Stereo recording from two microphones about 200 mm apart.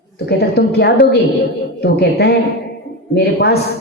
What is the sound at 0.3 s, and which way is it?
Speech, 55° left (ahead or behind).